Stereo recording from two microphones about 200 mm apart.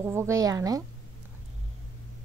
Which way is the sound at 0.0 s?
15° right (ahead or behind).